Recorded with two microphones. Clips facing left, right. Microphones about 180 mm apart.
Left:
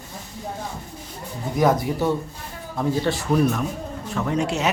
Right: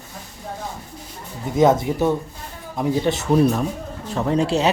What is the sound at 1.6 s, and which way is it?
A man's voice, 20° right (ahead or behind).